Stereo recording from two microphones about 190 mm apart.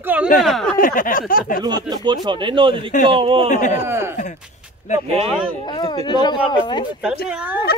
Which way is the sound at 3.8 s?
15° right (ahead or behind).